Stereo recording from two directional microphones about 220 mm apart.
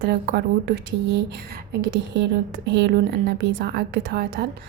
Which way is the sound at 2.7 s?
50° right (ahead or behind).